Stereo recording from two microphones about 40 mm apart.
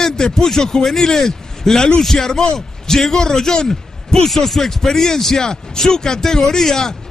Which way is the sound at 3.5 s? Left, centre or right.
Centre.